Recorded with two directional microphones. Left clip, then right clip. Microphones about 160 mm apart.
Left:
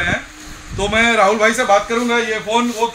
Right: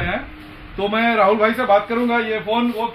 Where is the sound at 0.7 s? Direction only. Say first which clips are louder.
Left 3 dB; 20° left (ahead or behind).